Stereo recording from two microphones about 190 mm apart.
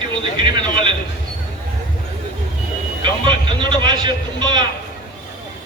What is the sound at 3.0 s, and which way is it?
A man's voice, 25° right (ahead or behind).